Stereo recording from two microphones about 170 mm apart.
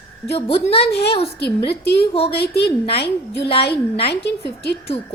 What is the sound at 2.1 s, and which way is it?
Speech, 35° left (ahead or behind).